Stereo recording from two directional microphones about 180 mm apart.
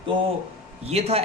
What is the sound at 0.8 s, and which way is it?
Speech, 35° right (ahead or behind).